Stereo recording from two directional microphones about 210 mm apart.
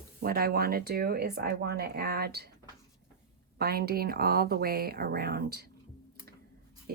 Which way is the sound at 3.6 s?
50° right (ahead or behind).